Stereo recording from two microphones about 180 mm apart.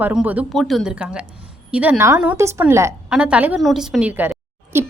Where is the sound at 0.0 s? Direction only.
10° right (ahead or behind).